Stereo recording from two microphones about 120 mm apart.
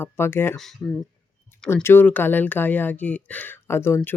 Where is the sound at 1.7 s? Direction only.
20° left (ahead or behind).